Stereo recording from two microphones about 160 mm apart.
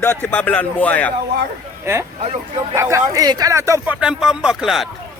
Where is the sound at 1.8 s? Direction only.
15° right (ahead or behind).